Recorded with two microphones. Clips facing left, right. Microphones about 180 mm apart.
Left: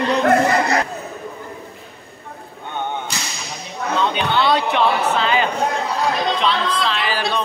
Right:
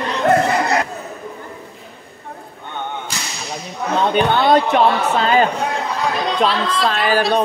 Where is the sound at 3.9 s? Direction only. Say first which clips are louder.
Right 4 dB; 50° right (ahead or behind).